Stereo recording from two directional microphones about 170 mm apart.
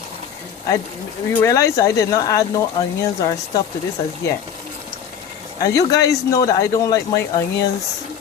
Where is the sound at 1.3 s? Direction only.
15° left (ahead or behind).